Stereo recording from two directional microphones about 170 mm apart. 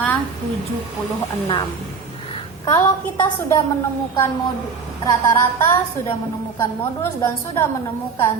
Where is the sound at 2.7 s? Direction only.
15° left (ahead or behind).